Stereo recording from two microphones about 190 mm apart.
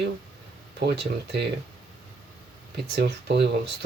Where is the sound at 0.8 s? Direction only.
60° right (ahead or behind).